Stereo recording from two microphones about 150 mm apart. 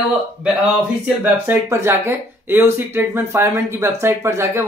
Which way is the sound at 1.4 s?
20° right (ahead or behind).